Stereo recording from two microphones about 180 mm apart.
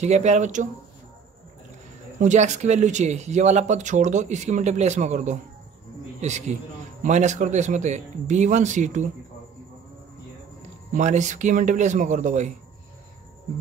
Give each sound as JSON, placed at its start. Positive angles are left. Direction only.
{"t": 0.0, "sound": "speech", "side_deg": -40}
{"t": 2.1, "sound": "speech", "side_deg": -40}
{"t": 10.9, "sound": "speech", "side_deg": -40}